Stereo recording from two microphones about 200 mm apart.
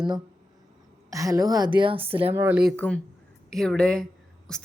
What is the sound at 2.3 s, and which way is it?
Speech, 10° right (ahead or behind).